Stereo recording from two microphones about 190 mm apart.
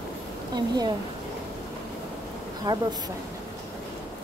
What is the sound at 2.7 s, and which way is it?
Speech, 20° right (ahead or behind).